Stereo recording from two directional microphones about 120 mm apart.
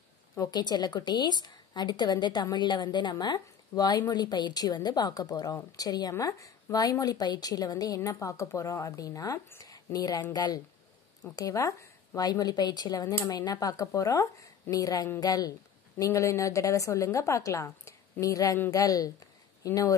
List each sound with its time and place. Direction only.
0.4 s a woman's voice: 35° left (ahead or behind)